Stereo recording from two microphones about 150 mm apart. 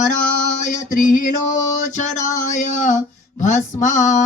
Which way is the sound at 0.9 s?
60° left (ahead or behind).